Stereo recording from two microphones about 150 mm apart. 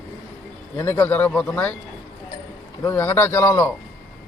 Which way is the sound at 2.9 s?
15° left (ahead or behind).